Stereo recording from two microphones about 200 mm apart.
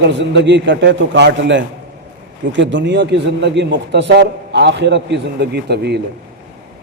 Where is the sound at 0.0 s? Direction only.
60° right (ahead or behind).